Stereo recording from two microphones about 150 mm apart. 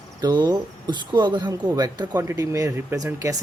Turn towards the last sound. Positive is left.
turn(degrees=-25)  # may be behind; listen again after turning